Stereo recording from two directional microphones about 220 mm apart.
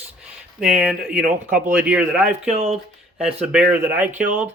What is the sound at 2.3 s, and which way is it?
Speech, 30° right (ahead or behind).